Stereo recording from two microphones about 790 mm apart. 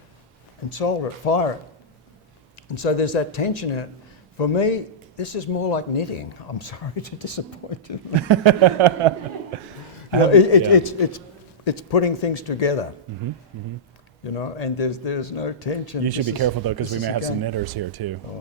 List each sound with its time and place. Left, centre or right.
0.7 s speech: left
2.6 s speech: left
8.3 s speech: right
10.2 s speech: left
14.3 s speech: left
16.0 s speech: right